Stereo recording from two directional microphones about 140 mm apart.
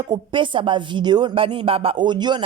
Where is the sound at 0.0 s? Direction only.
35° right (ahead or behind).